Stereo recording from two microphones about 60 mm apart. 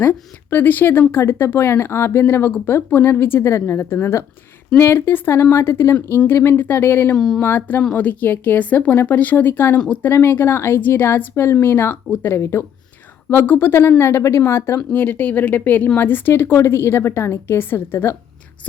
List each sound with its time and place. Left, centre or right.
0.0 s a woman's voice: left
7.2 s a sound: centre
7.4 s a woman's voice: left
9.7 s speech: left
10.1 s a woman's voice: left
13.3 s a woman's voice: left
14.9 s a woman's voice: left
16.3 s a woman's voice: left